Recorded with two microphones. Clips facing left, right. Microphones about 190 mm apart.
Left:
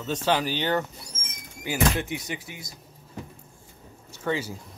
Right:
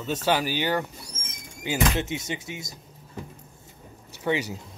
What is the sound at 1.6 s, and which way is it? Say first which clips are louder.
Speech: even; 20° right (ahead or behind).